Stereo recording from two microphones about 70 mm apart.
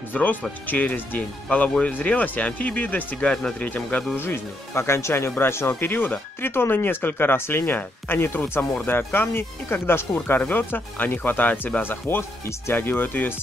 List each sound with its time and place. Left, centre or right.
0.1 s speech: left
4.2 s speech: left